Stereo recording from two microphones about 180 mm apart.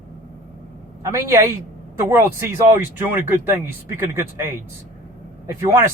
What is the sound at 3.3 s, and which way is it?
Speech, 10° right (ahead or behind).